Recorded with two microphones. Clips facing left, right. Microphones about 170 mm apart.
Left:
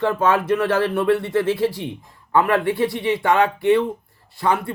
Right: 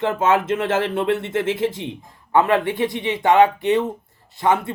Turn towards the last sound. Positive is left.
turn(degrees=-20)  # may be behind; listen again after turning